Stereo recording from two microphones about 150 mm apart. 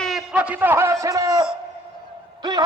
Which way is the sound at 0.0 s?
Centre (ahead or behind).